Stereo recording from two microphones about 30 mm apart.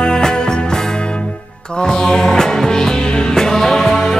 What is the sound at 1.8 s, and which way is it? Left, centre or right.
Music, left.